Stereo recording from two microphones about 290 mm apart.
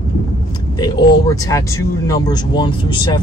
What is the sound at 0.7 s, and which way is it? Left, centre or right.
Speech, centre.